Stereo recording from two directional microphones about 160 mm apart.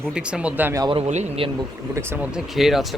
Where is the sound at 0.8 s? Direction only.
35° right (ahead or behind).